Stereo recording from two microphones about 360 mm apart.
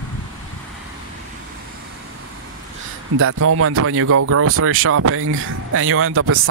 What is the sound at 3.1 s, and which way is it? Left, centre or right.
Speech, right.